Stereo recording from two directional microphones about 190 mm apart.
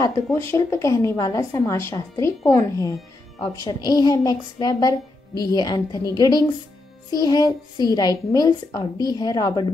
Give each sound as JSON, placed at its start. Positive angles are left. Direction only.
{"t": 0.0, "sound": "a woman's voice", "side_deg": 15}